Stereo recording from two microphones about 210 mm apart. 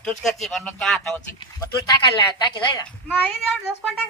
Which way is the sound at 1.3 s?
20° left (ahead or behind).